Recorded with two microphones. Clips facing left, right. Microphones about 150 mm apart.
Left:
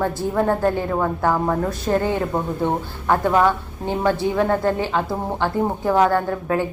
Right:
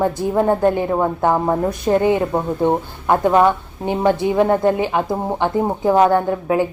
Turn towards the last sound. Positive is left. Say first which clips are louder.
# right 4 dB
turn(degrees=-15)  # may be behind; listen again after turning